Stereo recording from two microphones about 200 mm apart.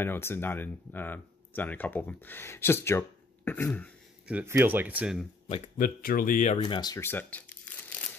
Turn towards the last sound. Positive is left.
turn(degrees=10)  # may be behind; listen again after turning